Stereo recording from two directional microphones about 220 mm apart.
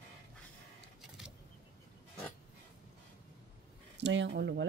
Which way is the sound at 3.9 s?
55° right (ahead or behind).